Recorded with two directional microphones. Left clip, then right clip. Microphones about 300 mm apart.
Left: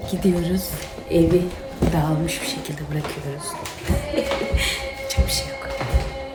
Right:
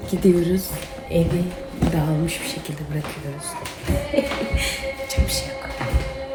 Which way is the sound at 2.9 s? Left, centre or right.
Centre.